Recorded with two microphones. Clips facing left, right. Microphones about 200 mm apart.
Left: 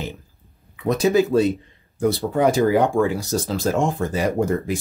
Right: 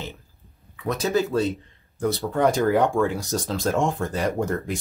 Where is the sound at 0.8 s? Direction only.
15° left (ahead or behind).